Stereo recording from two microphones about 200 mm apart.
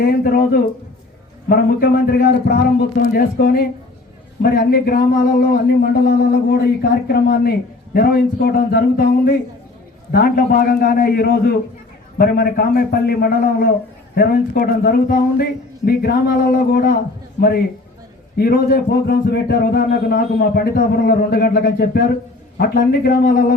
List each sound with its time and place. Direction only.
0.0 s speech: 50° left (ahead or behind)
18.3 s speech: 50° left (ahead or behind)